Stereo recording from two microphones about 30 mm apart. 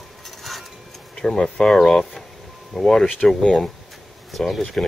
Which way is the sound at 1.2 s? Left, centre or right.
Centre.